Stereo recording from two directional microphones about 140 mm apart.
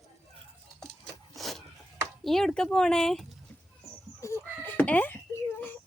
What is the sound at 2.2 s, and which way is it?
Speech, centre (ahead or behind).